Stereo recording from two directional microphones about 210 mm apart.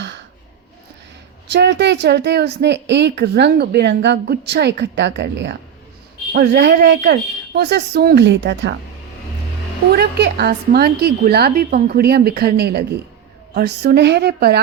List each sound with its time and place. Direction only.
1.5 s a woman's voice: 55° right (ahead or behind)
9.9 s a woman's voice: 50° right (ahead or behind)